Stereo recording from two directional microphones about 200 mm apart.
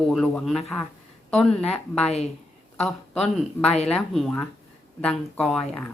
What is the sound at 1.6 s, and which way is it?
Speech, 30° left (ahead or behind).